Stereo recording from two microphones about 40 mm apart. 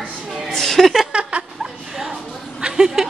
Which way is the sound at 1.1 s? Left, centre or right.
Right.